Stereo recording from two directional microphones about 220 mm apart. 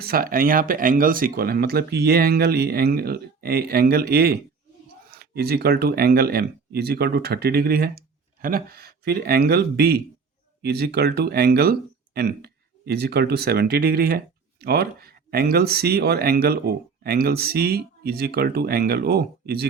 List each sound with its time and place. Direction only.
0.0 s speech: 40° right (ahead or behind)